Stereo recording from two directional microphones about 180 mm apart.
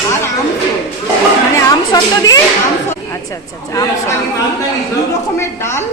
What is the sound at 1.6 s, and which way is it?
Speech, 20° left (ahead or behind).